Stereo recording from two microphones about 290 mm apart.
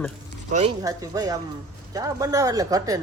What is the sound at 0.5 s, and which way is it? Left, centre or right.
Speech, right.